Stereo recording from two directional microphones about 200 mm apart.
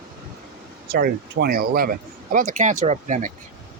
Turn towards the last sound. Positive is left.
turn(degrees=-40)  # may be behind; listen again after turning